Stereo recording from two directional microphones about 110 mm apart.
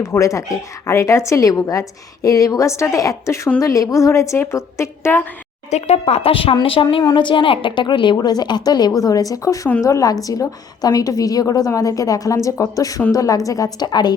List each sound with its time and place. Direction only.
0.0 s a woman's voice: 30° left (ahead or behind)
5.7 s speech: 75° left (ahead or behind); by 6.8 s 55° left (ahead or behind)
7.0 s a woman's voice: 45° left (ahead or behind)